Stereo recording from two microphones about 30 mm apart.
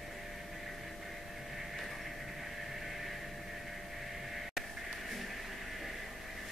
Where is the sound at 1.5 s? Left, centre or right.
Centre.